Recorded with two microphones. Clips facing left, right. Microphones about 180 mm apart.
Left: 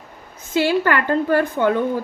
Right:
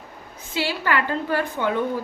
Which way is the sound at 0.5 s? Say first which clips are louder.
Left 6 dB; 50° left (ahead or behind).